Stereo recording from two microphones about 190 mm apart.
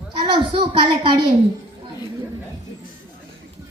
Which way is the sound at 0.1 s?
25° right (ahead or behind).